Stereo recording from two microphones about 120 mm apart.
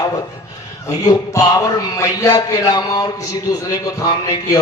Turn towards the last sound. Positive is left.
turn(degrees=30)  # may be behind; listen again after turning